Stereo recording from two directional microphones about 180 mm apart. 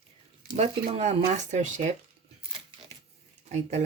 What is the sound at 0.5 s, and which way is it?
Speech, 35° right (ahead or behind).